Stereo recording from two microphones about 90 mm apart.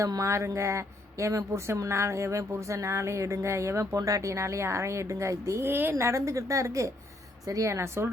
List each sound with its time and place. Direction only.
0.0 s speech: 35° right (ahead or behind)